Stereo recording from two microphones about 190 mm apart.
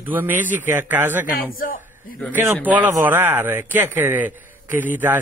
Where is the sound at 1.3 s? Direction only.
45° left (ahead or behind).